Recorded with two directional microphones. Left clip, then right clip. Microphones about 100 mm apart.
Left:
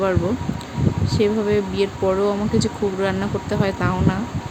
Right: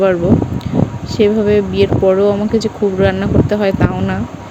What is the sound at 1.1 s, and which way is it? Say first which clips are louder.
Speech: right 8 dB; 35° right (ahead or behind).